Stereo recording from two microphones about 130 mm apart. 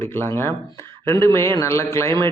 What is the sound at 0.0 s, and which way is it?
A man's voice, 20° left (ahead or behind).